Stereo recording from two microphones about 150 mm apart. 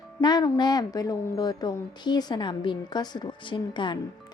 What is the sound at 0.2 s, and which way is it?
A woman's voice, 25° left (ahead or behind).